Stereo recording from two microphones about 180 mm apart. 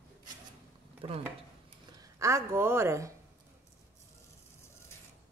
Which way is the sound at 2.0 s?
15° right (ahead or behind).